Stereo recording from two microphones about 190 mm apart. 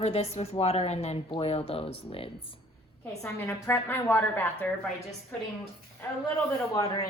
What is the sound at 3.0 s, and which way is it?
A woman's voice, 10° left (ahead or behind).